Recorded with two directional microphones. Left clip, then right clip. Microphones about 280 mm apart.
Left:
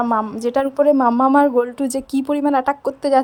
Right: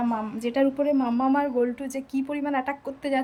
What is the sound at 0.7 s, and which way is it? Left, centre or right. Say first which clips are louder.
Speech: left 10 dB; left.